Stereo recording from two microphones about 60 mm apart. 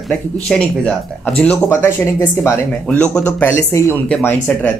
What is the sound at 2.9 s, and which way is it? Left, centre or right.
Speech, left.